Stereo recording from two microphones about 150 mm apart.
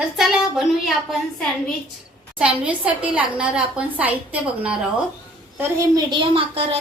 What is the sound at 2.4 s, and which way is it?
A woman's voice, 10° right (ahead or behind).